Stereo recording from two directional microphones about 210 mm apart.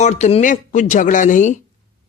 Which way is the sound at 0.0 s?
35° left (ahead or behind).